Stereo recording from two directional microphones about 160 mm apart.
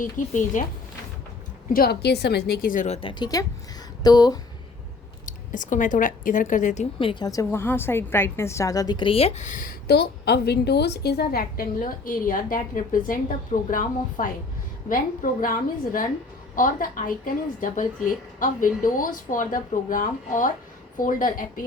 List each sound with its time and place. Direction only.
0.0 s speech: 50° left (ahead or behind)
1.7 s a woman's voice: 80° left; by 4.4 s 25° left (ahead or behind)
5.2 s speech: 55° left (ahead or behind)
7.0 s a woman's voice: 30° left (ahead or behind); by 21.6 s 60° left (ahead or behind)